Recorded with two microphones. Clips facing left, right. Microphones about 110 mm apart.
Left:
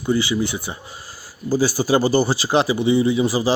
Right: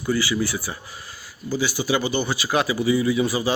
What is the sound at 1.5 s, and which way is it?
Speech, 40° left (ahead or behind).